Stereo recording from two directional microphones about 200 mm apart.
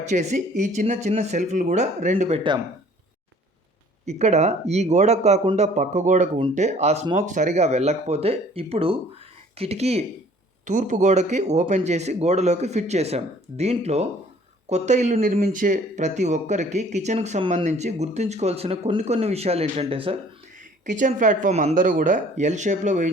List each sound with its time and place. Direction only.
0.1 s speech: 35° right (ahead or behind)
4.0 s speech: 35° right (ahead or behind)
20.8 s speech: 40° right (ahead or behind)